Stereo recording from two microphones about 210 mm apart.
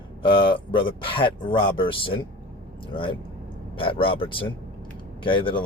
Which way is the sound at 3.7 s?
25° left (ahead or behind).